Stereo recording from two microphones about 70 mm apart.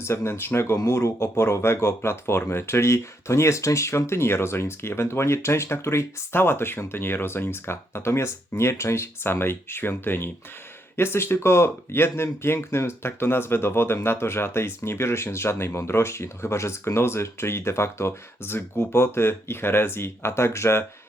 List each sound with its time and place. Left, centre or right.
0.0 s speech: left